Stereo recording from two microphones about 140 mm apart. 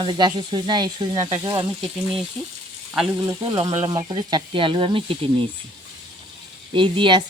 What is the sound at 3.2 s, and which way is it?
Speech, 30° right (ahead or behind).